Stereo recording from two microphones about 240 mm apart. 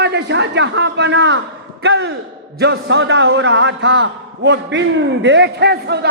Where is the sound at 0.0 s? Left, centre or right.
Right.